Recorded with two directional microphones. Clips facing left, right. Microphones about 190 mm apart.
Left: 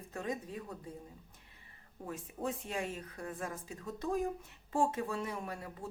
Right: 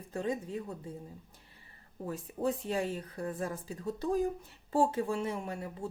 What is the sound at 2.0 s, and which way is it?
A woman's voice, 35° right (ahead or behind).